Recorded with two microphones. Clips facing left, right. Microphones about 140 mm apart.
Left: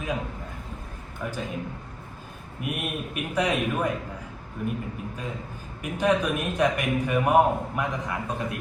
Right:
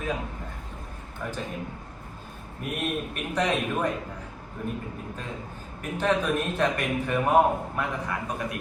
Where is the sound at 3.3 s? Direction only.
10° left (ahead or behind).